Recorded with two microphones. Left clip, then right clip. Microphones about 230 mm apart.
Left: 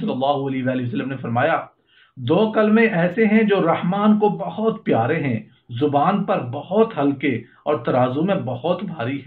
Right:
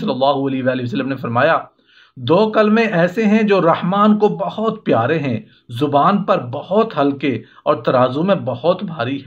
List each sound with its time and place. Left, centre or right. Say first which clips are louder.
0.0 s speech: right 5 dB; right